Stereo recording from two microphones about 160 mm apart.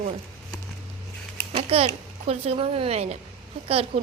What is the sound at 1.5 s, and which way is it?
A child's voice, 40° right (ahead or behind).